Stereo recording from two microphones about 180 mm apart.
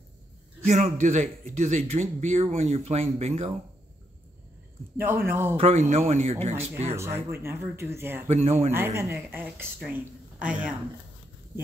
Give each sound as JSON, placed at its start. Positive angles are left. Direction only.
{"t": 0.7, "sound": "speech", "side_deg": -40}
{"t": 4.9, "sound": "a woman's voice", "side_deg": -10}
{"t": 5.6, "sound": "speech", "side_deg": -40}
{"t": 6.5, "sound": "a woman's voice", "side_deg": -15}
{"t": 8.3, "sound": "speech", "side_deg": -35}
{"t": 8.7, "sound": "a woman's voice", "side_deg": -15}